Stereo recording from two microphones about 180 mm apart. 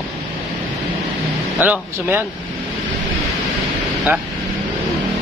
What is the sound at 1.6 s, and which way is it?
Speech, 10° right (ahead or behind).